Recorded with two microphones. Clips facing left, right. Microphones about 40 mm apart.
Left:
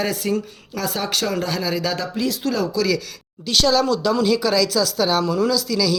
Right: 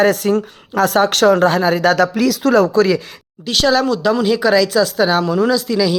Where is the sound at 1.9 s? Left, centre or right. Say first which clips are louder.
Right 9 dB; right.